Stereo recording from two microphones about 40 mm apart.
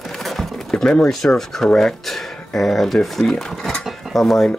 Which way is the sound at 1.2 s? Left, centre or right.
Centre.